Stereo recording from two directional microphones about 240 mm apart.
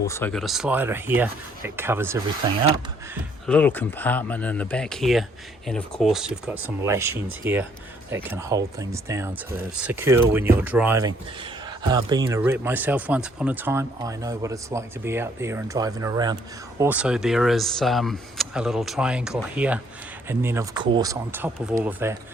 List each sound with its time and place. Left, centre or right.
0.0 s speech: centre
3.4 s speech: centre